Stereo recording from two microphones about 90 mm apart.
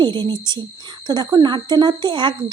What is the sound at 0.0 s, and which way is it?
A woman's voice, 60° right (ahead or behind).